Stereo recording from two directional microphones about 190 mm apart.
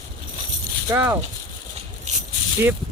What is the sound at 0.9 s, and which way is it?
Speech, 15° right (ahead or behind).